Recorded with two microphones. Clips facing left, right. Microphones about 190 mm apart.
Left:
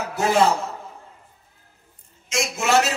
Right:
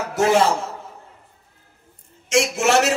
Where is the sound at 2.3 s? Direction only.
70° right (ahead or behind).